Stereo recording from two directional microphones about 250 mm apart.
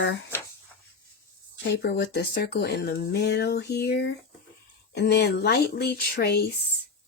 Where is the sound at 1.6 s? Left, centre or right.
Left.